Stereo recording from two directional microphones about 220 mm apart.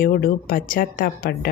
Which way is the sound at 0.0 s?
40° left (ahead or behind).